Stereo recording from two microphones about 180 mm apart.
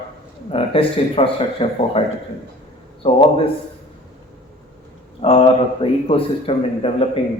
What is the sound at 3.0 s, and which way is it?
Speech, 30° left (ahead or behind).